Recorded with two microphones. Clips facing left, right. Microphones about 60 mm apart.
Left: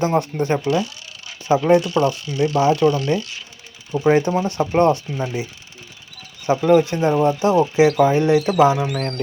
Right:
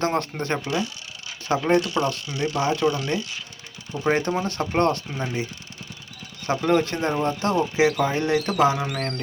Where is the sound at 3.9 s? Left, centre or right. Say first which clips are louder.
Left 6 dB; centre.